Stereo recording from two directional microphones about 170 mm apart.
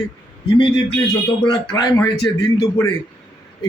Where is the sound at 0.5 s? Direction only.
30° left (ahead or behind).